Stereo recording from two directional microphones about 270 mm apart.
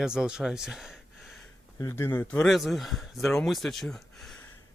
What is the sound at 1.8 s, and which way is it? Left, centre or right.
Speech, centre.